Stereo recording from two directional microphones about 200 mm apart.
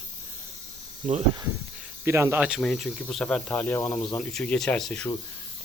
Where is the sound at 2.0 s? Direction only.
10° right (ahead or behind).